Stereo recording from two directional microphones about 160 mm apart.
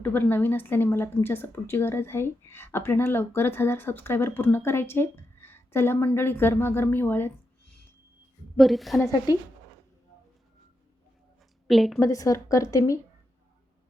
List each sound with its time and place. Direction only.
0.0 s a woman's voice: 10° left (ahead or behind)
8.5 s a woman's voice: centre (ahead or behind)
11.7 s a woman's voice: centre (ahead or behind)
11.9 s a woman's voice: 20° left (ahead or behind)